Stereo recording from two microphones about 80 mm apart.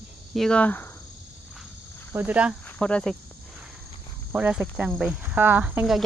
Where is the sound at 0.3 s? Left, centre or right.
Centre.